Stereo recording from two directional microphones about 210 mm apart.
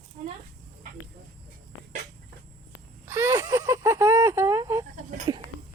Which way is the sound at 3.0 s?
15° right (ahead or behind).